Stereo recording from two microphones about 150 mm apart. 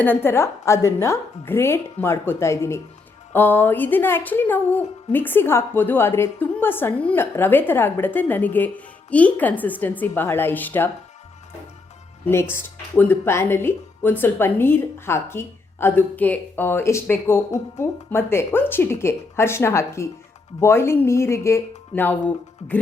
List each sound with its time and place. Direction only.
0.0 s speech: 15° left (ahead or behind)
12.2 s speech: 15° left (ahead or behind)